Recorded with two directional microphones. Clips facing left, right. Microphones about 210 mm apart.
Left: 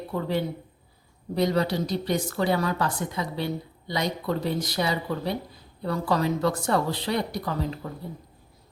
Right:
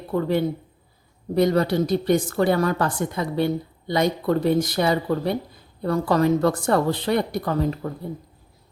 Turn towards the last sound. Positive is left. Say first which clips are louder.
# right 6 dB
turn(degrees=-50)  # may be behind; listen again after turning